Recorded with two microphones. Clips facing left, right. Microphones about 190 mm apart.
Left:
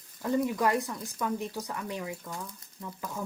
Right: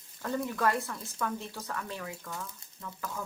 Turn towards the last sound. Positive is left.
turn(degrees=20)  # may be behind; listen again after turning